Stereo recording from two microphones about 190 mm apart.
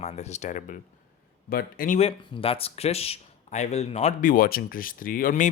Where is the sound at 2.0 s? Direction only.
30° left (ahead or behind).